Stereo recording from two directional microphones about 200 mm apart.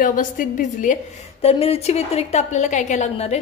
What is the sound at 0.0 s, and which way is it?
A woman's voice, 40° left (ahead or behind).